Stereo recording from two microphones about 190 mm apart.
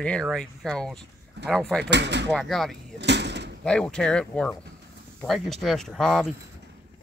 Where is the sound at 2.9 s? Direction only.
65° right (ahead or behind).